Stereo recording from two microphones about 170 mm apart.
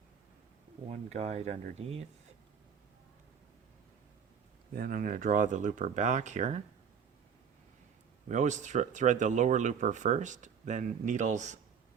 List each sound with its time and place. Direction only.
0.9 s speech: 40° right (ahead or behind)
4.7 s speech: 55° right (ahead or behind)
8.3 s speech: 45° right (ahead or behind)